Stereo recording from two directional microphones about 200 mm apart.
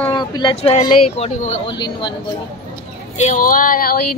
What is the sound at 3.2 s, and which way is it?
Speech, 40° left (ahead or behind).